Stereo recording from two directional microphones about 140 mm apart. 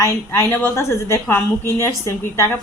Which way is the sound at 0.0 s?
20° left (ahead or behind).